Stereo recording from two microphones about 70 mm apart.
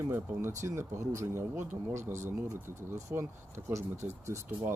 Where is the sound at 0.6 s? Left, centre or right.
Right.